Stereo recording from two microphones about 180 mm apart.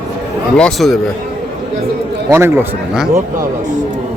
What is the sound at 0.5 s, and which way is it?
Speech, 5° left (ahead or behind).